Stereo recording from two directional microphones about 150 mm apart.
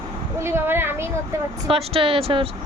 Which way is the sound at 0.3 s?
15° right (ahead or behind).